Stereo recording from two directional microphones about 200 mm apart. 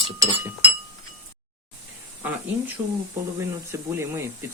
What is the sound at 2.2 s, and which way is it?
Speech, 10° right (ahead or behind).